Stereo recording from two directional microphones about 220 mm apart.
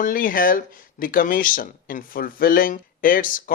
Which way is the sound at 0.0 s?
40° left (ahead or behind).